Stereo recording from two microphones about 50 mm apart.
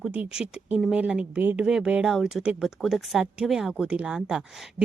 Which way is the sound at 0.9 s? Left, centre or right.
Right.